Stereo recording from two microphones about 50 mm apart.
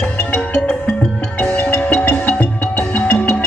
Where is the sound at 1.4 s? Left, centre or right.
Left.